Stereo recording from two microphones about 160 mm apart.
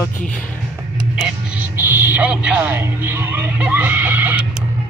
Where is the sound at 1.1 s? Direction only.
5° right (ahead or behind).